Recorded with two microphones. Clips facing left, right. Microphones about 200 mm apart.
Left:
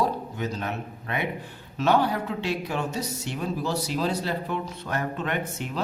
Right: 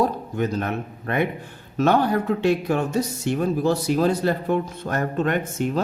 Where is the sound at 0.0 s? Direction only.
55° right (ahead or behind).